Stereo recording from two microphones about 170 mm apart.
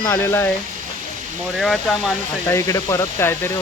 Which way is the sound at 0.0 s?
15° left (ahead or behind).